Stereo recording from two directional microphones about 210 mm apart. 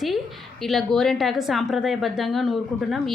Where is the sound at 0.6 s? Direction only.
Centre (ahead or behind).